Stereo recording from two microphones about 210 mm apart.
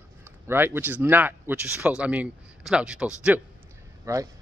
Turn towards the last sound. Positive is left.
turn(degrees=-15)  # may be behind; listen again after turning